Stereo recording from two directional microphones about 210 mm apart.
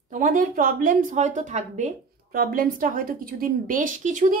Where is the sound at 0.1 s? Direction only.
40° right (ahead or behind).